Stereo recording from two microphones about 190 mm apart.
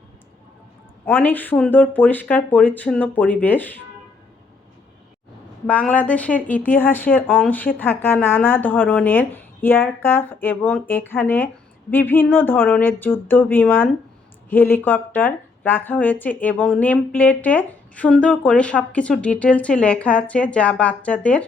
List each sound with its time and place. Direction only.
1.0 s speech: 10° left (ahead or behind)
5.6 s speech: 5° left (ahead or behind)